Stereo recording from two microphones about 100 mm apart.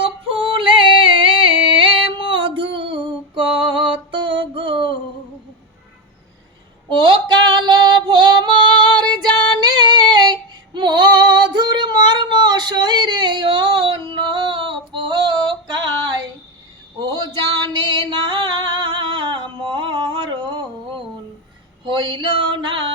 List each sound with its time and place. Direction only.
0.0 s yodeling: 60° right (ahead or behind)
6.9 s female singing: 55° right (ahead or behind)
9.6 s a sound: 45° right (ahead or behind)
10.8 s female singing: 50° right (ahead or behind)
17.6 s music: 50° right (ahead or behind)
21.8 s a sound: 50° right (ahead or behind)